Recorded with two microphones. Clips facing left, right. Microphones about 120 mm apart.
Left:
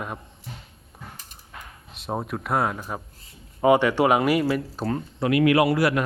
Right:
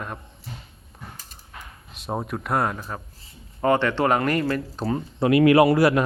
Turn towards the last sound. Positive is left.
turn(degrees=-30)  # may be behind; listen again after turning